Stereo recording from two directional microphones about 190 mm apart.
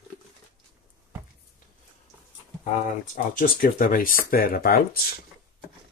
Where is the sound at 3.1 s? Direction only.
45° left (ahead or behind).